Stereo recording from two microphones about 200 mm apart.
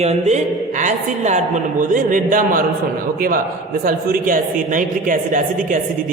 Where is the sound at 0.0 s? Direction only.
35° right (ahead or behind).